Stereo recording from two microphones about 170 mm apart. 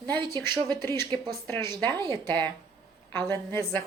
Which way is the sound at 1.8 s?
25° right (ahead or behind).